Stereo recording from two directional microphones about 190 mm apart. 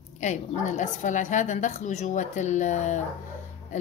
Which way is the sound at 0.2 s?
40° left (ahead or behind).